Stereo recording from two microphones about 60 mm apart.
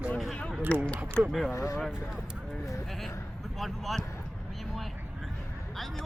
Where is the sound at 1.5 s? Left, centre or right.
Left.